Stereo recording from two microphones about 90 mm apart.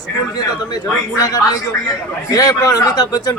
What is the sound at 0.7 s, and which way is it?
A man's voice, 40° left (ahead or behind).